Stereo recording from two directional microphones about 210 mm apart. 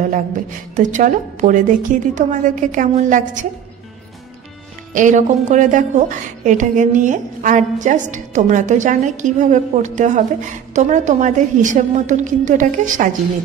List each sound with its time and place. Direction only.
0.7 s a woman's voice: 35° right (ahead or behind)
4.9 s a woman's voice: 35° right (ahead or behind)